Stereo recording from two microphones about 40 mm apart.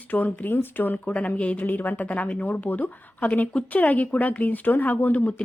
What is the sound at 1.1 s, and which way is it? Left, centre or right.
Speech, left.